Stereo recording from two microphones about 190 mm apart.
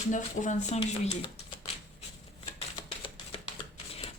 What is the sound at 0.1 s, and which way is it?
Speech, 40° left (ahead or behind).